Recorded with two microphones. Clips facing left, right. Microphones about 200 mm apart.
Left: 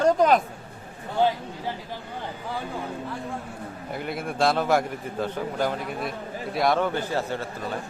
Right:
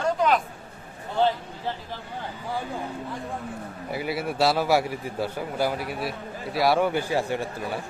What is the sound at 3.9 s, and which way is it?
A man's voice, 5° right (ahead or behind).